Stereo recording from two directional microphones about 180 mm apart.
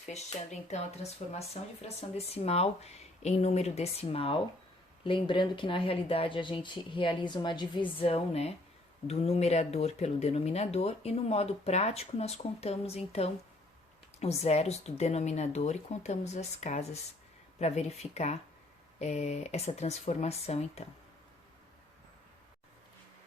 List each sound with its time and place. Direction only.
0.1 s speech: 40° left (ahead or behind)